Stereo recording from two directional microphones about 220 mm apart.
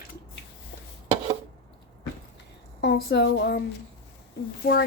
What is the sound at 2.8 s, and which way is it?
Speech, 50° left (ahead or behind).